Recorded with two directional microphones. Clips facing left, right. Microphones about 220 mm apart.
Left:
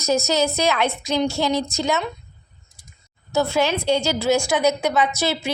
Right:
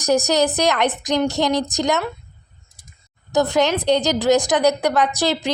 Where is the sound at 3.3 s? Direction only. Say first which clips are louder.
Right 3 dB; 15° right (ahead or behind).